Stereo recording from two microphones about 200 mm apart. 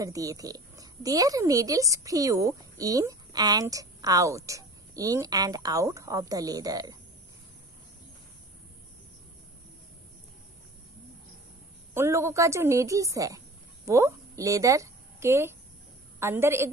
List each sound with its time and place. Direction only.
0.0 s a woman's voice: 15° right (ahead or behind)
11.9 s a woman's voice: 15° right (ahead or behind)